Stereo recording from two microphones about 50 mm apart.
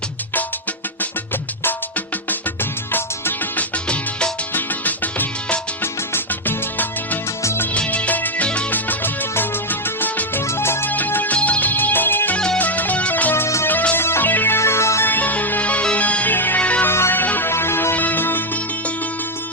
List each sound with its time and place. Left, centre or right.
3.6 s music: left
4.5 s music: left
5.8 s music: left
7.7 s music: left
10.8 s music: left
13.9 s music: left
14.6 s music: left
15.0 s music: left
16.3 s music: left
16.6 s music: left
16.9 s music: left
17.2 s music: left
17.5 s music: left
17.9 s music: left